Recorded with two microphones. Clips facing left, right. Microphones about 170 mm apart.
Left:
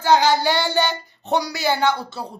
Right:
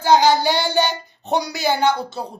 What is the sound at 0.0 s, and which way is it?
Child singing, 15° right (ahead or behind).